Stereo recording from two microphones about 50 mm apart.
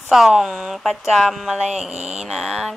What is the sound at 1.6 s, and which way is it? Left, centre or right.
Speech, centre.